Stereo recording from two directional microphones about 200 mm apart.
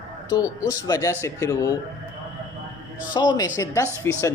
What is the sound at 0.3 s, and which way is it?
Speech, 20° left (ahead or behind).